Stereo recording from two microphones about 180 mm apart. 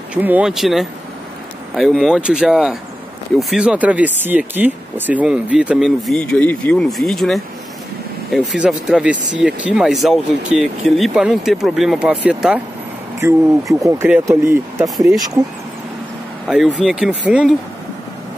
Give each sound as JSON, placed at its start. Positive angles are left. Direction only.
{"t": 0.1, "sound": "speech", "side_deg": -10}
{"t": 13.2, "sound": "speech", "side_deg": -15}
{"t": 16.4, "sound": "speech", "side_deg": -5}